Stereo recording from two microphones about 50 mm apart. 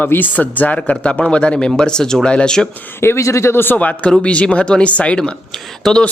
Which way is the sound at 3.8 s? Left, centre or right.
Left.